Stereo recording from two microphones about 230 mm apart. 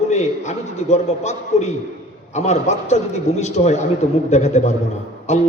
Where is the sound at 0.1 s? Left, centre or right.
Left.